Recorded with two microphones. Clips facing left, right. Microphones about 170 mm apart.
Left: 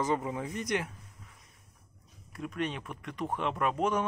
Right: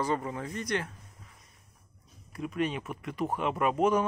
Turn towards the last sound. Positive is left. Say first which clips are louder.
# right 4 dB
turn(degrees=-5)  # may be behind; listen again after turning